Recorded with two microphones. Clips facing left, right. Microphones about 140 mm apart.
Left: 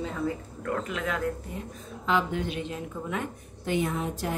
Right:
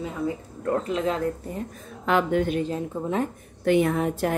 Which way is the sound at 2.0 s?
55° right (ahead or behind).